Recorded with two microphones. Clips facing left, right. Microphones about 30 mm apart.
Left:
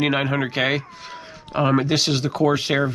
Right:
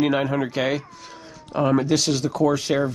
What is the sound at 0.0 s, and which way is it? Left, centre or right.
Speech, left.